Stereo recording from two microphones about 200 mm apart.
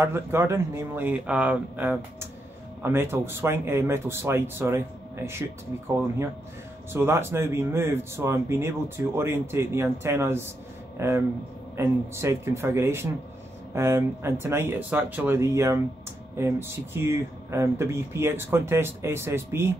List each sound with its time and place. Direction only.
0.0 s speech: 10° right (ahead or behind)
6.9 s speech: 10° right (ahead or behind)